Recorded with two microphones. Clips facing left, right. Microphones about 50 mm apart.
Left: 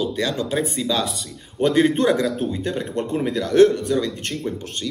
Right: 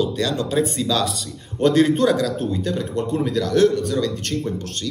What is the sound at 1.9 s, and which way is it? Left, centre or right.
Speech, left.